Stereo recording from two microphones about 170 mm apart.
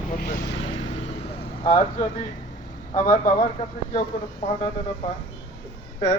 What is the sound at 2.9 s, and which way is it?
Speech, 45° left (ahead or behind).